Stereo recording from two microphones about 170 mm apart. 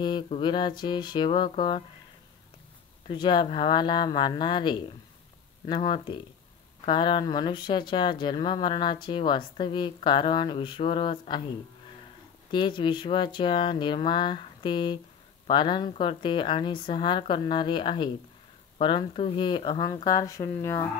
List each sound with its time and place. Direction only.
0.0 s speech: 30° left (ahead or behind)
3.1 s speech: 25° left (ahead or behind)
12.4 s speech: 30° left (ahead or behind)